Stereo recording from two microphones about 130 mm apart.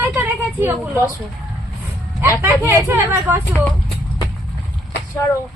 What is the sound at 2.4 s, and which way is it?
Speech, 15° right (ahead or behind).